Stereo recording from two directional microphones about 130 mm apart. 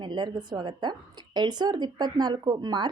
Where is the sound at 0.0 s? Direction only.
35° right (ahead or behind).